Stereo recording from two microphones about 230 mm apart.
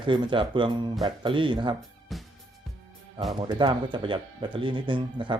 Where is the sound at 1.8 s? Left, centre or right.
Centre.